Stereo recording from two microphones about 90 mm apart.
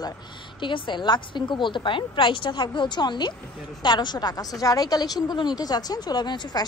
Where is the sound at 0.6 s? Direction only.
60° left (ahead or behind).